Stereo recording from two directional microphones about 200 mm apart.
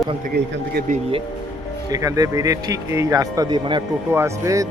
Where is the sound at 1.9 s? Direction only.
15° right (ahead or behind).